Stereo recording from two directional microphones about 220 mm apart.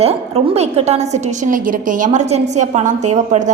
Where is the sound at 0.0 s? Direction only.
25° right (ahead or behind).